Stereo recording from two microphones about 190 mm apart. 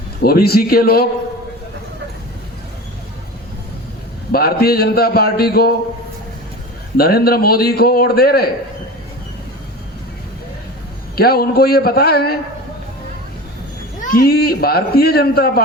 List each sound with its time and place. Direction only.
0.2 s a man's voice: 55° left (ahead or behind)
4.3 s a man's voice: 55° left (ahead or behind)
6.9 s a man's voice: 55° left (ahead or behind)
11.1 s a man's voice: 55° left (ahead or behind)
14.0 s a man's voice: 50° left (ahead or behind)